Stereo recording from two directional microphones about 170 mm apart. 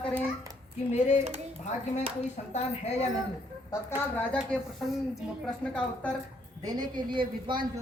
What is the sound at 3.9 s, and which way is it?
A woman's voice, 10° left (ahead or behind).